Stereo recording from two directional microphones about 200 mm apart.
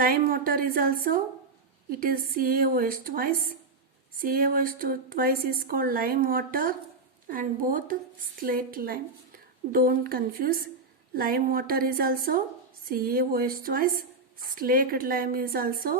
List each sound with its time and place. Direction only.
0.0 s a woman's voice: 45° right (ahead or behind)